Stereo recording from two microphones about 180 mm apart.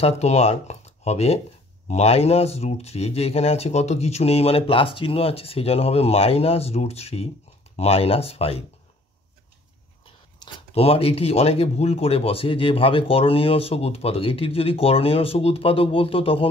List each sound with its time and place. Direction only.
0.0 s speech: 35° left (ahead or behind)
10.4 s speech: 30° left (ahead or behind)